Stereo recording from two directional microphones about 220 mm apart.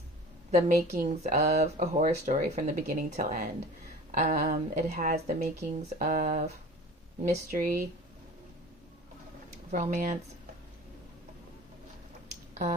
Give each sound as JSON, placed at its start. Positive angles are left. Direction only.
{"t": 0.5, "sound": "speech", "side_deg": -40}
{"t": 9.7, "sound": "speech", "side_deg": -35}